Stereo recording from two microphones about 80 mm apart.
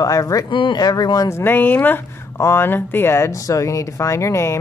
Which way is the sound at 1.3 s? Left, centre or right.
Left.